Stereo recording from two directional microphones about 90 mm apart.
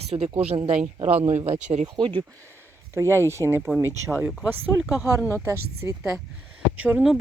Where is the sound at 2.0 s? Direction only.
70° right (ahead or behind).